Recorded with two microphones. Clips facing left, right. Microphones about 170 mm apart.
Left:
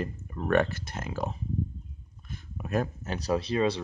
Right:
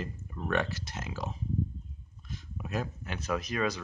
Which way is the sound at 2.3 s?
55° left (ahead or behind).